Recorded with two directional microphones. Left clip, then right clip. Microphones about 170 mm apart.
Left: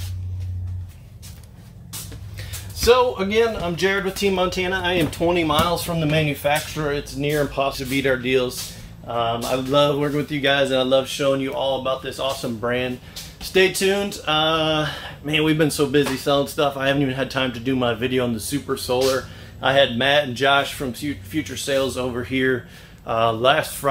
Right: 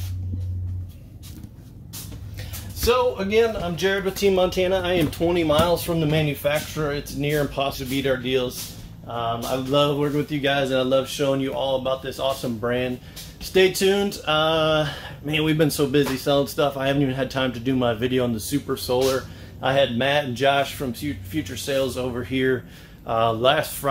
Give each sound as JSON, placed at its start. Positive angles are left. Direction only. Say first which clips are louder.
{"t": 2.8, "sound": "speech", "louder": "left 4 dB", "side_deg": 5}
{"t": 7.9, "sound": "speech", "louder": "left 3 dB", "side_deg": 25}
{"t": 10.5, "sound": "speech", "louder": "left 3 dB", "side_deg": -15}